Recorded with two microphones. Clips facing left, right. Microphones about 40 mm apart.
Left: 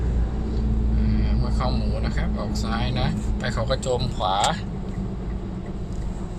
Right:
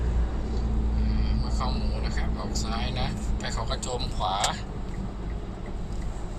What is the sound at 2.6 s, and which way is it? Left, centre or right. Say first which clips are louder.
Speech: left 6 dB; centre.